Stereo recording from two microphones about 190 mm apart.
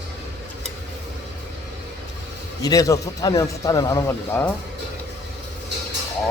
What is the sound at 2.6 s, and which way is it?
A man's voice, 20° left (ahead or behind).